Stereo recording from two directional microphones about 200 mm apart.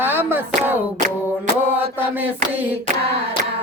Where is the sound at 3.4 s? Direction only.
40° right (ahead or behind).